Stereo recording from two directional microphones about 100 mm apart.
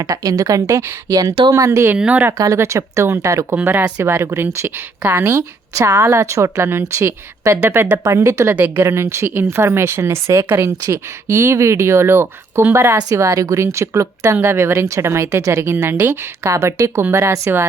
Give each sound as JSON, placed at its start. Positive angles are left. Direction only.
{"t": 0.0, "sound": "a woman's voice", "side_deg": -35}
{"t": 2.0, "sound": "speech", "side_deg": -15}
{"t": 2.4, "sound": "speech", "side_deg": -30}
{"t": 3.6, "sound": "speech", "side_deg": -20}